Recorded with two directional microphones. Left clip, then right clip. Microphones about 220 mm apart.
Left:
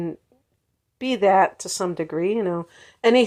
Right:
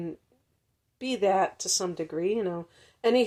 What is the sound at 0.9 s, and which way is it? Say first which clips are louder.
Speech: left 8 dB; 20° left (ahead or behind).